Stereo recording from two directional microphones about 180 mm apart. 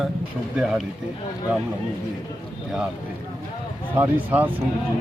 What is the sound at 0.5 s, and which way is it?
Speech, 5° right (ahead or behind).